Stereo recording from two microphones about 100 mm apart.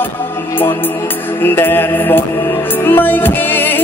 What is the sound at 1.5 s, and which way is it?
Music, 20° left (ahead or behind).